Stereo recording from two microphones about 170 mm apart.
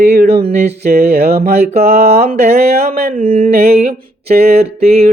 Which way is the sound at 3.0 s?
50° right (ahead or behind).